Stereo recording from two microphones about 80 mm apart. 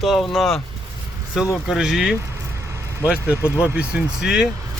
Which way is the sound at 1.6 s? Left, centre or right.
Centre.